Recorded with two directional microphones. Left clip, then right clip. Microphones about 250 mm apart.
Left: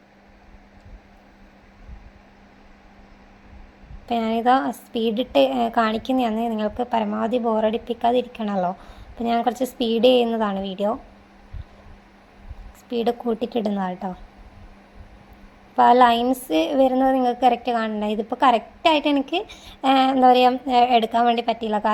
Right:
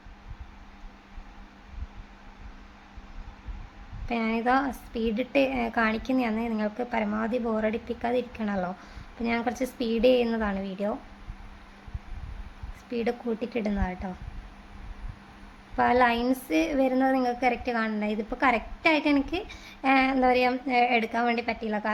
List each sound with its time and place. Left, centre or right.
4.1 s a woman's voice: centre
12.9 s a woman's voice: centre
15.7 s a woman's voice: centre